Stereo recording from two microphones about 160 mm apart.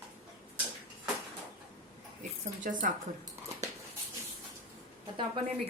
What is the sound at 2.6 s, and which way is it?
Speech, 55° right (ahead or behind).